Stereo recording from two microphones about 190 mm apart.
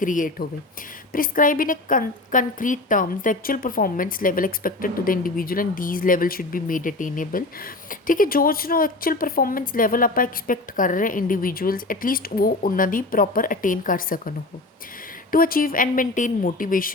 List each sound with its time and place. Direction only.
0.0 s a woman's voice: 45° left (ahead or behind)